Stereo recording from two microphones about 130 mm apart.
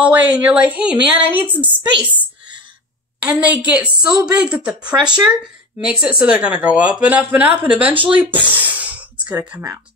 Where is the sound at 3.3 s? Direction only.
10° right (ahead or behind).